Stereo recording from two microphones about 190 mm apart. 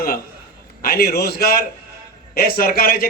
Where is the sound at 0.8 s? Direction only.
50° left (ahead or behind).